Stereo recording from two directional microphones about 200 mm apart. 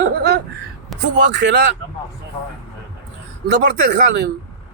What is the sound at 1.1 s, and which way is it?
Speech, 55° right (ahead or behind).